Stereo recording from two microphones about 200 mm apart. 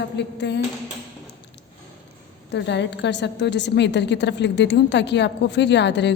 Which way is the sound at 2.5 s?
60° left (ahead or behind).